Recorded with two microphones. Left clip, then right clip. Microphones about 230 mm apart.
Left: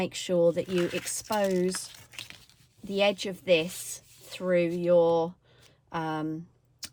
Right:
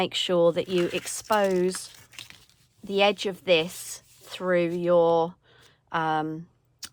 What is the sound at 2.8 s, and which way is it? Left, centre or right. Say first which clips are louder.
Speech: right 4 dB; centre.